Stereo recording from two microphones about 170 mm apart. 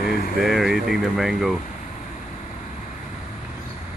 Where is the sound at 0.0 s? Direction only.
60° left (ahead or behind).